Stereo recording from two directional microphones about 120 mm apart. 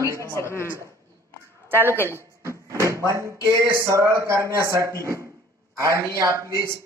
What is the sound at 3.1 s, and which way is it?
Speech, 25° right (ahead or behind).